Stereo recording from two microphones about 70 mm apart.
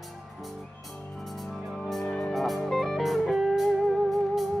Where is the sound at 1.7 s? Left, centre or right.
Centre.